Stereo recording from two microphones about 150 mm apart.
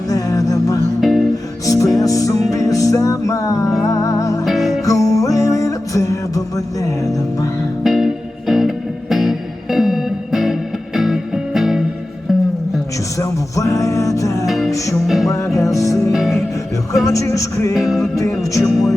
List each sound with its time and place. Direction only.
0.1 s music: 20° left (ahead or behind)
1.0 s music: centre (ahead or behind)
1.6 s music: 20° left (ahead or behind)
4.4 s music: centre (ahead or behind)
4.9 s music: 20° left (ahead or behind)
7.9 s music: centre (ahead or behind)
13.1 s music: 20° left (ahead or behind)
14.4 s music: centre (ahead or behind)
15.6 s music: 20° left (ahead or behind)
16.1 s music: centre (ahead or behind)
17.1 s music: 20° left (ahead or behind)
17.7 s music: centre (ahead or behind)